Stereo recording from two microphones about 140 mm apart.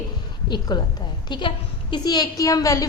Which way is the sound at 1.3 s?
35° left (ahead or behind).